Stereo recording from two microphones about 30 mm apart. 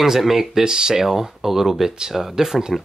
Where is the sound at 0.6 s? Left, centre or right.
Centre.